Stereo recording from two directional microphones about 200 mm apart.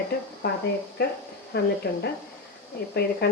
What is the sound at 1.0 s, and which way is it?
Speech, 50° left (ahead or behind).